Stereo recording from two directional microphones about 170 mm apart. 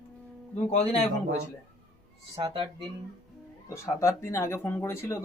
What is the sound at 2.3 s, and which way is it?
Speech, 30° right (ahead or behind).